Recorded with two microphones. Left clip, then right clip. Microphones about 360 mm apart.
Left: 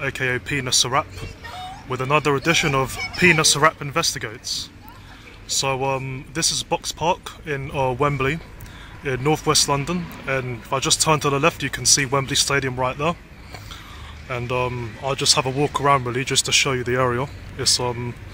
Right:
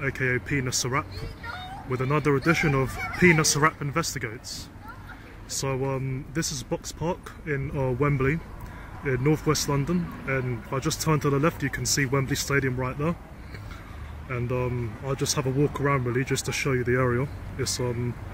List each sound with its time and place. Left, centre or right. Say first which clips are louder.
0.0 s speech: left 4 dB; centre
15.0 s speech: left 9 dB; centre